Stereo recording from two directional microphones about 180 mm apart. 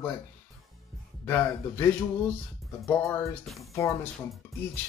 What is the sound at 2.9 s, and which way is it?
Speech, 10° left (ahead or behind).